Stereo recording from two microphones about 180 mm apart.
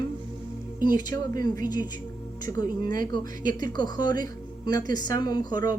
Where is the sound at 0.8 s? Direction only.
50° right (ahead or behind).